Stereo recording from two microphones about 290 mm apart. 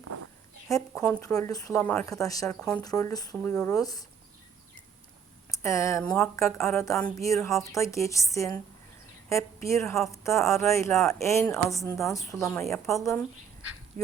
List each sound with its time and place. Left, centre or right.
0.7 s speech: centre
5.5 s speech: centre
9.6 s speech: centre
14.0 s speech: right